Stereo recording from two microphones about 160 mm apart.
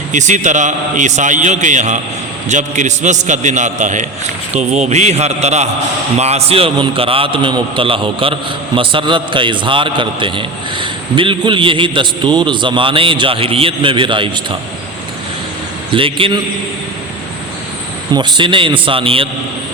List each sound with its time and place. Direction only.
0.1 s a man's voice: 50° right (ahead or behind); by 14.3 s 30° right (ahead or behind)
15.9 s a man's voice: 35° right (ahead or behind)
18.1 s a man's voice: 30° right (ahead or behind)